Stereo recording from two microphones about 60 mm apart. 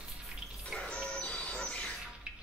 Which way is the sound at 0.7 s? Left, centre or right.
Centre.